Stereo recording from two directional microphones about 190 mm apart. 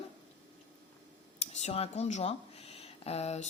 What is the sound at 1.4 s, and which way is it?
Speech, 35° left (ahead or behind).